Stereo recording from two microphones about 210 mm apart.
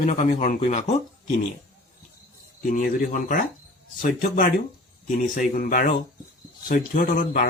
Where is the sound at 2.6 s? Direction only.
40° left (ahead or behind).